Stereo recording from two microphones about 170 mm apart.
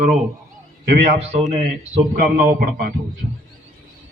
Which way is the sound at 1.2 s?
40° right (ahead or behind).